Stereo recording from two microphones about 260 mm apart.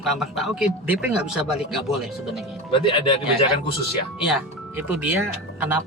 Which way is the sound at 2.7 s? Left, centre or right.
Centre.